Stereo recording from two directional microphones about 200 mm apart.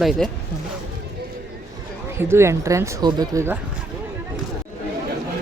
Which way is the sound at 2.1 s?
15° right (ahead or behind).